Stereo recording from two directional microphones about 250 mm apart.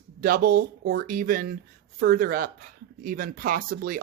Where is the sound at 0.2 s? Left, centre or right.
Right.